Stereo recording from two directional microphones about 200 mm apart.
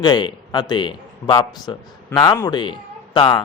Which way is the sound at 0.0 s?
20° left (ahead or behind).